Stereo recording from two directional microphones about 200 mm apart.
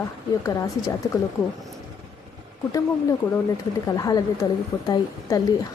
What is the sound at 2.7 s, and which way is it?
A woman's voice, 15° left (ahead or behind).